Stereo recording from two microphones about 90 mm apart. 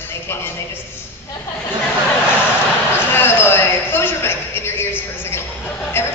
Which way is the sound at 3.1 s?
25° left (ahead or behind).